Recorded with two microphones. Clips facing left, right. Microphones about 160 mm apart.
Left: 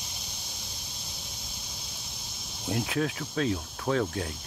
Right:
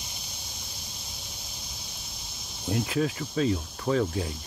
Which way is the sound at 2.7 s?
Centre (ahead or behind).